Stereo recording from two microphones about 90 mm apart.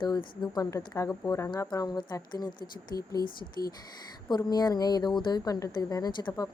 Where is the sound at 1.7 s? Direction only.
55° left (ahead or behind).